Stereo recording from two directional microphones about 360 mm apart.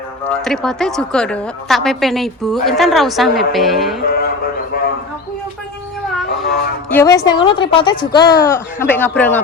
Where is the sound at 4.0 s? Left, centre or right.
Left.